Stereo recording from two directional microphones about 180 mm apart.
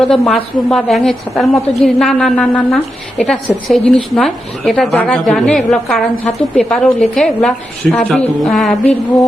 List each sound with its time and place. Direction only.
0.0 s a woman's voice: centre (ahead or behind)